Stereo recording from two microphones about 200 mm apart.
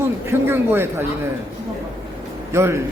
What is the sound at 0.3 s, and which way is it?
Speech, 10° right (ahead or behind).